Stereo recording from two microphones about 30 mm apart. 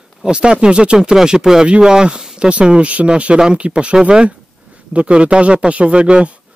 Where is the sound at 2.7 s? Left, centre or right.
Right.